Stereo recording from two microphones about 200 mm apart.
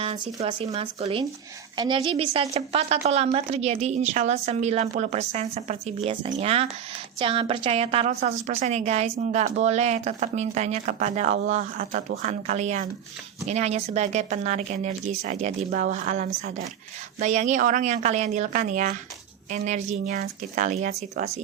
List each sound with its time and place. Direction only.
0.0 s a woman's voice: 30° right (ahead or behind)